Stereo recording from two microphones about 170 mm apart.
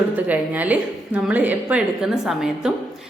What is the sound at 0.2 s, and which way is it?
A woman's voice, 10° right (ahead or behind).